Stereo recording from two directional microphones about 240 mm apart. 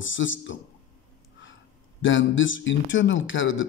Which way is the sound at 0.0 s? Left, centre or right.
Left.